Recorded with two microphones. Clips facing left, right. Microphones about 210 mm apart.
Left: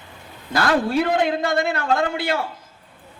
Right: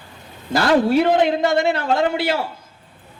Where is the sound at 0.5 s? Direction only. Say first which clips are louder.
Right 4 dB; 25° right (ahead or behind).